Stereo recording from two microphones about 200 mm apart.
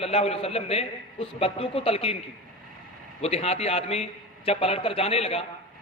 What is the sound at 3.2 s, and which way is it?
A man's voice, 30° left (ahead or behind).